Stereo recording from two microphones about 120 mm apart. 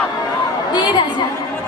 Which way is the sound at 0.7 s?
35° left (ahead or behind).